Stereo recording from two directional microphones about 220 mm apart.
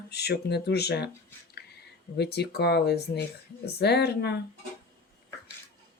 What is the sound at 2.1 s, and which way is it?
Speech, 50° left (ahead or behind).